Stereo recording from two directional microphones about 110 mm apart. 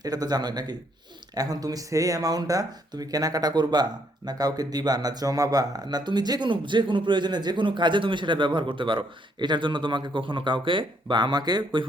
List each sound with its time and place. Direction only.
0.0 s speech: 35° right (ahead or behind)